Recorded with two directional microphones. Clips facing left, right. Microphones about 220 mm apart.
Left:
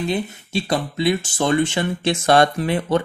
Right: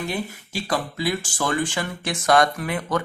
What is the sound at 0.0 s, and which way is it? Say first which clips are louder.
Speech: left 5 dB; 20° left (ahead or behind).